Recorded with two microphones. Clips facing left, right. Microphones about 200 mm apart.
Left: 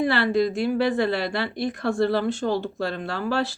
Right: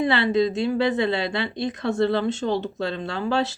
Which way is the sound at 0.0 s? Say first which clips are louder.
Right 1 dB; 20° right (ahead or behind).